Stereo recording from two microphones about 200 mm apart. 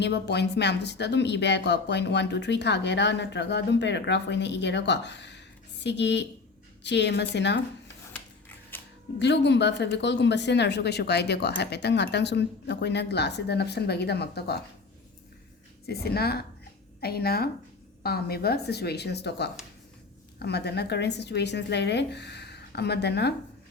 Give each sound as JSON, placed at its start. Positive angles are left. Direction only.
{"t": 0.0, "sound": "speech", "side_deg": 60}
{"t": 8.1, "sound": "a sound", "side_deg": 10}
{"t": 9.1, "sound": "speech", "side_deg": 60}
{"t": 15.9, "sound": "a woman's voice", "side_deg": 50}